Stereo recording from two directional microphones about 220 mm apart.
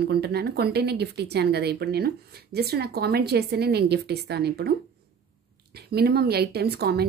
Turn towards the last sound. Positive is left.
turn(degrees=-45)  # may be behind; listen again after turning